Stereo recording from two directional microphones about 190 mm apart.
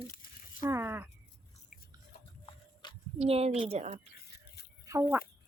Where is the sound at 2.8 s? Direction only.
25° left (ahead or behind).